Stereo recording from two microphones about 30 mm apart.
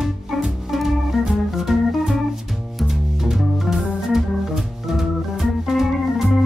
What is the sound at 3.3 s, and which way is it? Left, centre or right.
Organ, centre.